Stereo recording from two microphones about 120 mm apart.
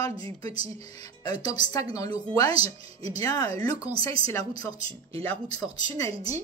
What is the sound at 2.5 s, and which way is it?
Speech, 55° right (ahead or behind).